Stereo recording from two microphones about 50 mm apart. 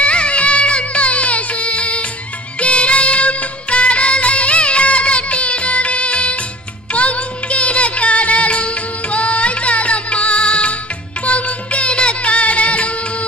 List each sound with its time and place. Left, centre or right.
0.0 s music: left